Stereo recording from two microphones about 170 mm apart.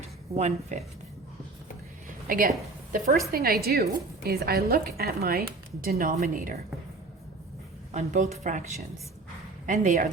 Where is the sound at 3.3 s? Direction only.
65° right (ahead or behind).